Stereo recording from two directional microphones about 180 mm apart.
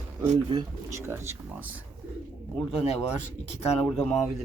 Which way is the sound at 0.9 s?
15° right (ahead or behind).